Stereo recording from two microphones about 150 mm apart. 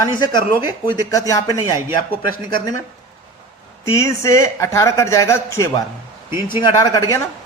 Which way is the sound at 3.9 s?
20° left (ahead or behind).